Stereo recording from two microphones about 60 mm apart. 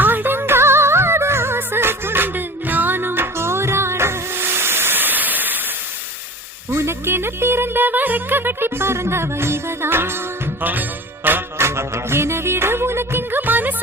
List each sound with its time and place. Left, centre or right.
0.0 s music: right
6.7 s music: right
10.6 s music: right